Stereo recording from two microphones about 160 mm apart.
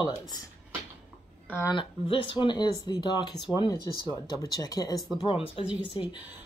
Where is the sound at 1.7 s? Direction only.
30° left (ahead or behind).